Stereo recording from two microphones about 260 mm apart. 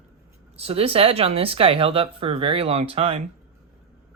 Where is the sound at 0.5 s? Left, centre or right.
Right.